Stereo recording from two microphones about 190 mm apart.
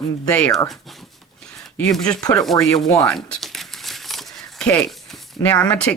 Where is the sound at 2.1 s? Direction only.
20° left (ahead or behind).